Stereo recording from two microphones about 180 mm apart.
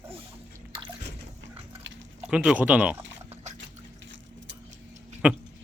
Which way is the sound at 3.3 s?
40° right (ahead or behind).